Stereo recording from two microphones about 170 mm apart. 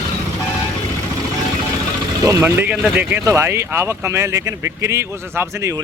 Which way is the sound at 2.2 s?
15° right (ahead or behind).